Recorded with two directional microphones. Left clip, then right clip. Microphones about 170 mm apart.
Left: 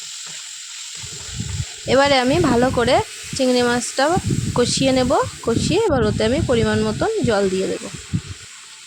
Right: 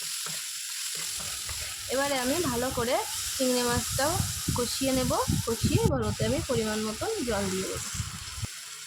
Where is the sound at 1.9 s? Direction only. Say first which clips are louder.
Left 13 dB; 60° left (ahead or behind).